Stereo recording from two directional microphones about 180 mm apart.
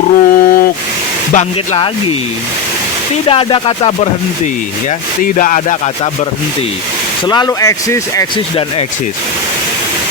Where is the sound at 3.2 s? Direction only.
30° left (ahead or behind).